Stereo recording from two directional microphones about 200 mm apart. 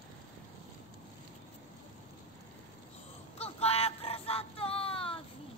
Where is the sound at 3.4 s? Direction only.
30° left (ahead or behind).